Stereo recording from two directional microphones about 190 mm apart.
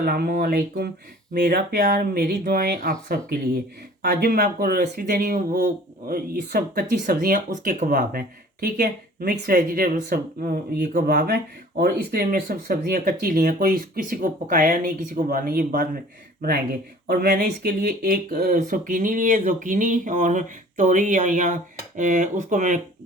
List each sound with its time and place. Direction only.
0.0 s speech: 55° right (ahead or behind)
17.1 s speech: 55° right (ahead or behind); by 22.8 s 40° right (ahead or behind)